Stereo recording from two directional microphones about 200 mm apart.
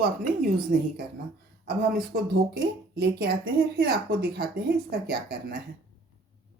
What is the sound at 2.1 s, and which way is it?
Speech, 50° right (ahead or behind).